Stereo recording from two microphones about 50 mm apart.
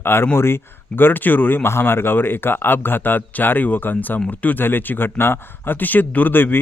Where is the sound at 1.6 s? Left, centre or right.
Left.